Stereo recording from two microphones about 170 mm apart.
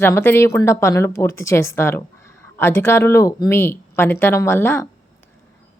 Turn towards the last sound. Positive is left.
turn(degrees=15)  # may be behind; listen again after turning